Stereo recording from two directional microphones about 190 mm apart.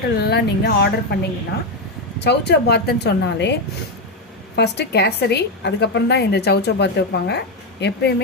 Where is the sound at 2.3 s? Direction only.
60° left (ahead or behind).